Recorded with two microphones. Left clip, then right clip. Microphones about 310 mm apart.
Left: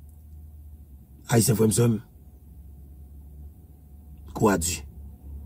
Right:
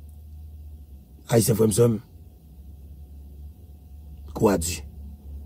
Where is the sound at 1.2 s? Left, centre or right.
Centre.